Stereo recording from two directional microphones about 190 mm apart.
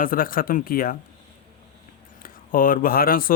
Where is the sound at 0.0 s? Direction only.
50° left (ahead or behind).